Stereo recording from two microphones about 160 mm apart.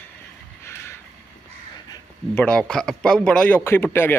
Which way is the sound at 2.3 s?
5° left (ahead or behind).